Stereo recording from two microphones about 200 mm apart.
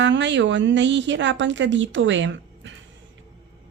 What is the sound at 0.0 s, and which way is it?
A woman's voice, 65° right (ahead or behind).